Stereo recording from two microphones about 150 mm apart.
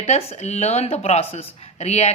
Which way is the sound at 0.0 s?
40° left (ahead or behind).